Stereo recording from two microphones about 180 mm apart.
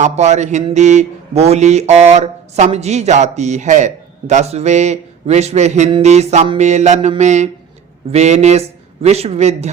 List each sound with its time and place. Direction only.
0.0 s a man's voice: 40° right (ahead or behind)